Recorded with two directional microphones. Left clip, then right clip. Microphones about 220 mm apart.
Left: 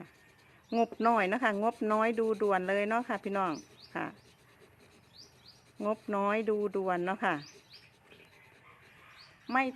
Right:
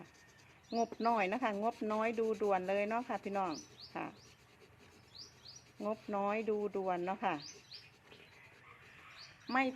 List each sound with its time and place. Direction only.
0.7 s speech: 25° left (ahead or behind)
5.9 s speech: 25° left (ahead or behind)
9.5 s speech: 10° left (ahead or behind)